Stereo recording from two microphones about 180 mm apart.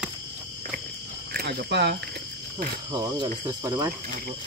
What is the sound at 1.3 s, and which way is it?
Speech, 65° right (ahead or behind).